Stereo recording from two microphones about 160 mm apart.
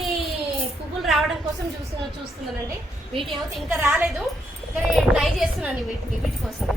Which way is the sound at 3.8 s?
10° right (ahead or behind).